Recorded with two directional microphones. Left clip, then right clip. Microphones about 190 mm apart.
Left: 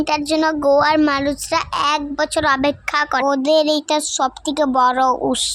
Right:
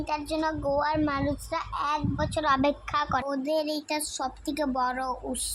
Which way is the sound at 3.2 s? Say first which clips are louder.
Left 13 dB; 45° left (ahead or behind).